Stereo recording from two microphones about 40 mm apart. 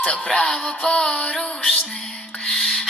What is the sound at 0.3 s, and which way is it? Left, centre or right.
Music, left.